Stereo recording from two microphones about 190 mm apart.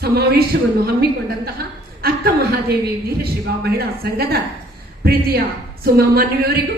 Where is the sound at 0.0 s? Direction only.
55° right (ahead or behind).